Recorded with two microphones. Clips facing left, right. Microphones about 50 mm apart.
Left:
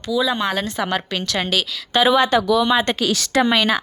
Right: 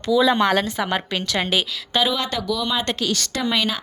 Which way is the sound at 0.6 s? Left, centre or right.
Centre.